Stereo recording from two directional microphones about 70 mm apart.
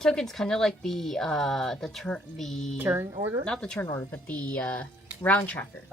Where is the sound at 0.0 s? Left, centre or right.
Centre.